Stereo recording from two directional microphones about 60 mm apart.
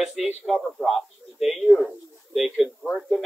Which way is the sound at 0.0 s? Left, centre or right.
Centre.